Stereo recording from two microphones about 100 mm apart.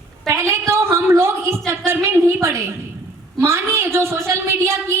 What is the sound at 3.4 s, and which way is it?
Speech, 25° right (ahead or behind).